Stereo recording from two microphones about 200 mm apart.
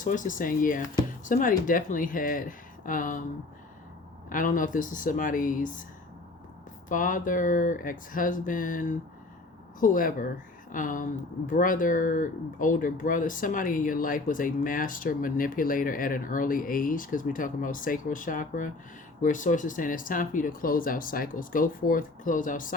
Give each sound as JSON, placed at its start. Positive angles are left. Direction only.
{"t": 0.0, "sound": "speech", "side_deg": 40}
{"t": 4.3, "sound": "speech", "side_deg": 40}
{"t": 6.8, "sound": "speech", "side_deg": 40}